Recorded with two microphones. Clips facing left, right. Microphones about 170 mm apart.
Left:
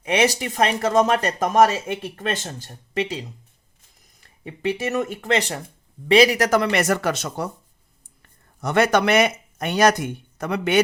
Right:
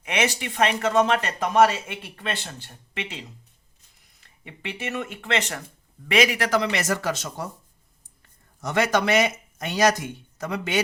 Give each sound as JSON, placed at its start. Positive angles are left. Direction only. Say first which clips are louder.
{"t": 0.0, "sound": "speech", "louder": "left 5 dB", "side_deg": 35}
{"t": 4.4, "sound": "speech", "louder": "left 9 dB", "side_deg": 35}
{"t": 8.6, "sound": "speech", "louder": "left 4 dB", "side_deg": 60}